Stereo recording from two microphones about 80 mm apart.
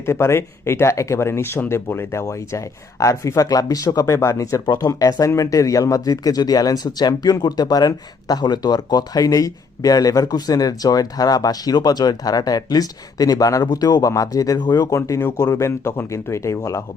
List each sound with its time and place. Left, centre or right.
0.0 s speech: left